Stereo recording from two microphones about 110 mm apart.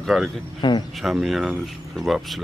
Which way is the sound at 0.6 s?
45° left (ahead or behind).